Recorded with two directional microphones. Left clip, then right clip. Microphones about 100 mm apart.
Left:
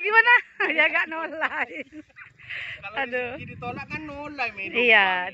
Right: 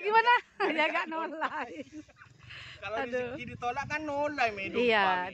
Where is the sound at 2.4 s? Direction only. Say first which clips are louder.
Left 13 dB; 15° left (ahead or behind).